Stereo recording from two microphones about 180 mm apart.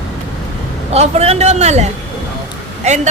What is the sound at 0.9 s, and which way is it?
A man's voice, 35° right (ahead or behind).